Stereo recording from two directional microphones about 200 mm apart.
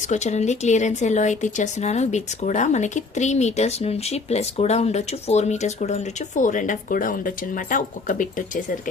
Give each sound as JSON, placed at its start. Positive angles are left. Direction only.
{"t": 0.1, "sound": "speech", "side_deg": 35}